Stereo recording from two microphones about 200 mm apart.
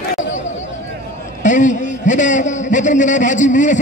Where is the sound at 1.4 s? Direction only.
40° left (ahead or behind).